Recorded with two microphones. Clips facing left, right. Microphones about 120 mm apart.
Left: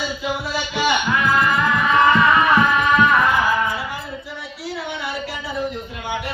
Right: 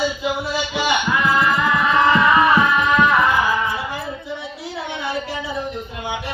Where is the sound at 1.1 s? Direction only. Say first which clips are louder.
Even; centre (ahead or behind).